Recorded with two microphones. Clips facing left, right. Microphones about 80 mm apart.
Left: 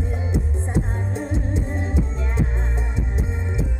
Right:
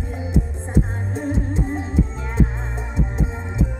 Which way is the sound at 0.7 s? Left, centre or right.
Right.